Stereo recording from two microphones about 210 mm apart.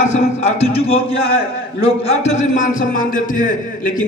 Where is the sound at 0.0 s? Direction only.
35° left (ahead or behind).